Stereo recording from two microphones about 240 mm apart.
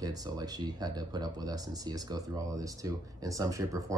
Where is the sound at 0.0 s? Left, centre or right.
Centre.